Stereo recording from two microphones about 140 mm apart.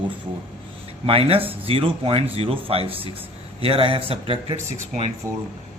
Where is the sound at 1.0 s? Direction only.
45° right (ahead or behind).